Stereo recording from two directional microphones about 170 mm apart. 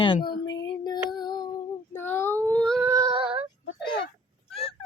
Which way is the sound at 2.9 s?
20° right (ahead or behind).